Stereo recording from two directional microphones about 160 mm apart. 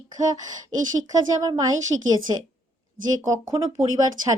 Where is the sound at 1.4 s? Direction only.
20° right (ahead or behind).